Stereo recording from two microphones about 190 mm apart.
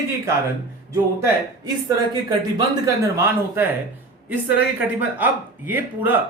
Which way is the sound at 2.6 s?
15° right (ahead or behind).